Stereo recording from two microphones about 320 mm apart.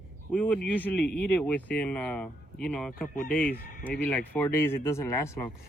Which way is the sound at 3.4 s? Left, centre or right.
Left.